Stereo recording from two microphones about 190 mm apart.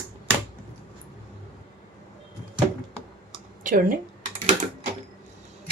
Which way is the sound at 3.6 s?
45° right (ahead or behind).